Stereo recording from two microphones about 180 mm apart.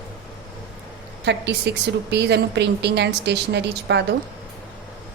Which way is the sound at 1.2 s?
70° right (ahead or behind).